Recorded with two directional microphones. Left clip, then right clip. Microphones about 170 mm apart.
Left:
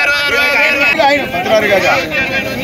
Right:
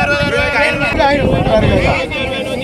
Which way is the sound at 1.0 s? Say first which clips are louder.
Left 1 dB; 35° right (ahead or behind).